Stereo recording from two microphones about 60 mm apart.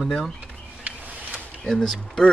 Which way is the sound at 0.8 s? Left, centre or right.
Right.